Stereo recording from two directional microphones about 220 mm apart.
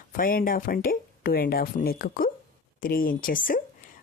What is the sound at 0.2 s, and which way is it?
Speech, 40° left (ahead or behind).